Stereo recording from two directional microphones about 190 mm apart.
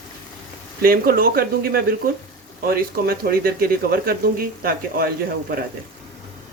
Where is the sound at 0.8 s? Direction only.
50° right (ahead or behind).